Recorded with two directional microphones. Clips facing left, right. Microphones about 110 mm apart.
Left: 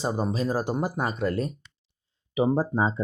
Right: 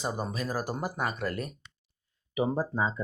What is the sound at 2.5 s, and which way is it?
Speech, 35° left (ahead or behind).